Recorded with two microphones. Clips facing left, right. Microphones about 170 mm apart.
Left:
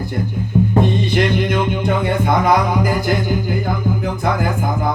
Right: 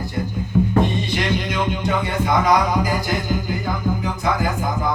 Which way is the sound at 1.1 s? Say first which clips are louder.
Left 6 dB; 55° left (ahead or behind).